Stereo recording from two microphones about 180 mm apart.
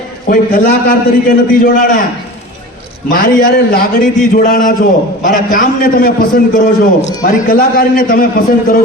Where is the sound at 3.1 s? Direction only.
55° left (ahead or behind).